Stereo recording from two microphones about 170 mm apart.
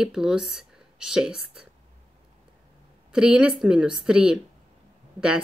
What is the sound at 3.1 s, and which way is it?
Speech, 5° right (ahead or behind).